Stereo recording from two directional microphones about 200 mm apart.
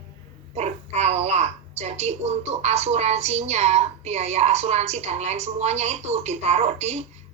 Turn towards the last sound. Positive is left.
turn(degrees=-30)  # may be behind; listen again after turning